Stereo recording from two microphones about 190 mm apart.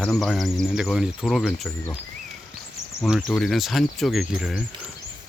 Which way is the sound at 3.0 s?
Centre (ahead or behind).